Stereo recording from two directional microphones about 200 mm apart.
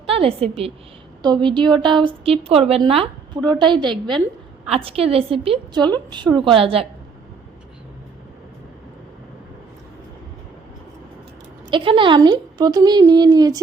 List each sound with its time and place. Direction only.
0.0 s a woman's voice: 30° right (ahead or behind)
11.7 s a woman's voice: 25° right (ahead or behind)